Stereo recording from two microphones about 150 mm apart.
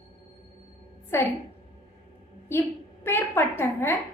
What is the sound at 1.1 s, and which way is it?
Speech, 15° left (ahead or behind).